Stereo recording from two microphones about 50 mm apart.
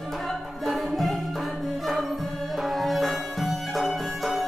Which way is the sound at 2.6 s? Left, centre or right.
Centre.